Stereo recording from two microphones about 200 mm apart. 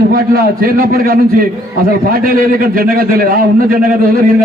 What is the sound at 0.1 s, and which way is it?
A man's voice, 45° right (ahead or behind).